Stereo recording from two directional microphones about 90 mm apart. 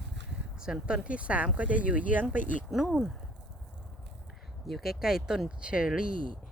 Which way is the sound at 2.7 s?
5° right (ahead or behind).